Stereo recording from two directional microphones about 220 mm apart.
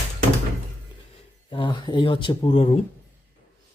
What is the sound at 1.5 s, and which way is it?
Speech, 20° left (ahead or behind).